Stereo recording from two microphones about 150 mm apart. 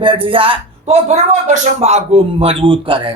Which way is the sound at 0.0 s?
35° right (ahead or behind).